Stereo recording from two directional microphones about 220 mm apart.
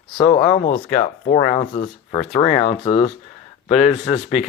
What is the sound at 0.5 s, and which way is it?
Speech, 35° left (ahead or behind).